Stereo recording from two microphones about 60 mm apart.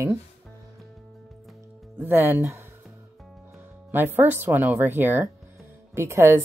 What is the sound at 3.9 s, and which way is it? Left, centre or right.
Speech, right.